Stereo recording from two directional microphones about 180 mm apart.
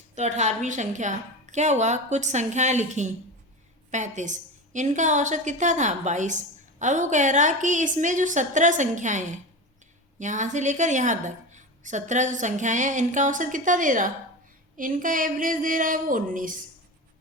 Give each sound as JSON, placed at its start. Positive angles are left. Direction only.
{"t": 0.2, "sound": "a woman's voice", "side_deg": -40}